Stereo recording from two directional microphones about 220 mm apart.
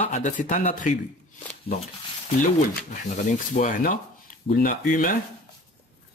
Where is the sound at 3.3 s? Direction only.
35° left (ahead or behind).